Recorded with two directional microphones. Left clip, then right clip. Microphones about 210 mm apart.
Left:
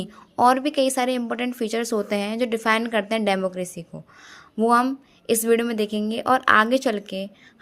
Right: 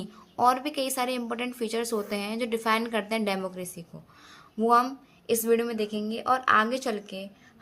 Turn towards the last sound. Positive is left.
turn(degrees=40)  # may be behind; listen again after turning